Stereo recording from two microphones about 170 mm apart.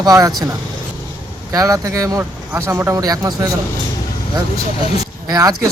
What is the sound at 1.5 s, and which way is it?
Speech, 20° right (ahead or behind).